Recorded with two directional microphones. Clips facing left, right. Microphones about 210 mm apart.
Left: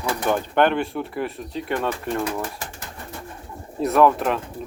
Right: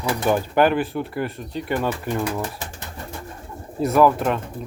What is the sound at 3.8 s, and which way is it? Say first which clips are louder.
Speech: right 1 dB; centre (ahead or behind).